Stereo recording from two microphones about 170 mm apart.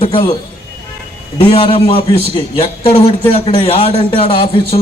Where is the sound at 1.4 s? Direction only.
35° left (ahead or behind).